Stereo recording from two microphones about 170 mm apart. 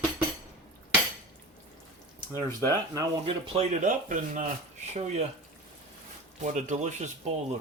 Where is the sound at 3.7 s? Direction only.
50° right (ahead or behind).